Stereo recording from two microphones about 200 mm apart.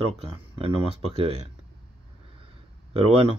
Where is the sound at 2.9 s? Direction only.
30° right (ahead or behind).